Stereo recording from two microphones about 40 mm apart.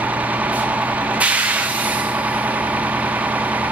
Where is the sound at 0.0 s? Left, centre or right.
Right.